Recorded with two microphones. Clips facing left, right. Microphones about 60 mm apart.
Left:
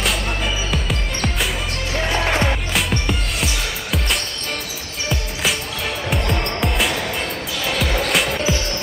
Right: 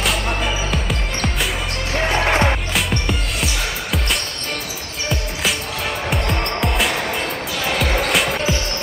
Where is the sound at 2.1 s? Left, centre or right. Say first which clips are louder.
Right 2 dB; centre.